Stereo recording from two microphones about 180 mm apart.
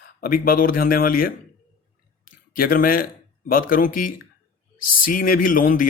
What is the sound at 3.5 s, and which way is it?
Speech, 50° left (ahead or behind).